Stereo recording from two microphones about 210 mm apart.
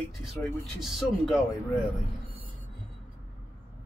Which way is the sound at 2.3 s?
25° right (ahead or behind).